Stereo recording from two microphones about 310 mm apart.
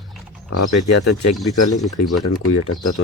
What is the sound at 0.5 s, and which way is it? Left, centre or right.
Speech, left.